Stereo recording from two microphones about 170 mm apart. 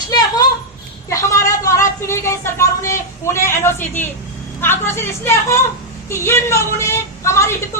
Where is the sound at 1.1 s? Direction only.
20° left (ahead or behind).